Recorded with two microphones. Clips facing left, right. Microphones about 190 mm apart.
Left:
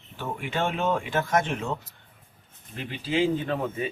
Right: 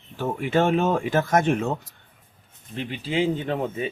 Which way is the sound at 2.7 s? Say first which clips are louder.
Right 1 dB; 25° right (ahead or behind).